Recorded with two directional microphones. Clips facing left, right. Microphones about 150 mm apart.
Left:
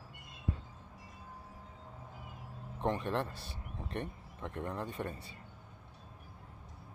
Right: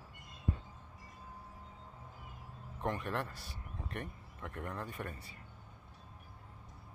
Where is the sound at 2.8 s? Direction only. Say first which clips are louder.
Left 3 dB; 25° left (ahead or behind).